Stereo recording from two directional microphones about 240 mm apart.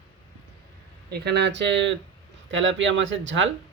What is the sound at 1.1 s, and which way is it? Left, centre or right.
Speech, right.